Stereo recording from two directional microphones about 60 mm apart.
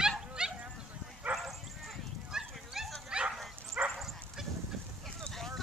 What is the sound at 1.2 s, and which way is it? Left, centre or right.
Bow-wow, right.